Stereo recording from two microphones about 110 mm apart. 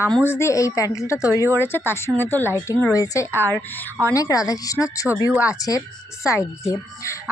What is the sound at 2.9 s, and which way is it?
Speech, 30° left (ahead or behind).